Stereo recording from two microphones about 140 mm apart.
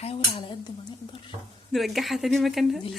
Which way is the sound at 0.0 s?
45° left (ahead or behind).